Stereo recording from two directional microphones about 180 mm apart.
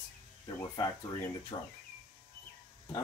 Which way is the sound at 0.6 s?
20° left (ahead or behind).